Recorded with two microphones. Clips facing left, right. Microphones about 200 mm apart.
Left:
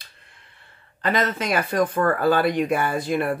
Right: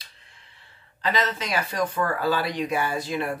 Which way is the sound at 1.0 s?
55° left (ahead or behind).